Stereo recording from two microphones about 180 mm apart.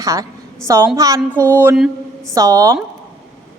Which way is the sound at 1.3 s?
10° left (ahead or behind).